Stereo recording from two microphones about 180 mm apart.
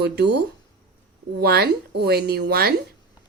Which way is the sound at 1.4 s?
65° right (ahead or behind).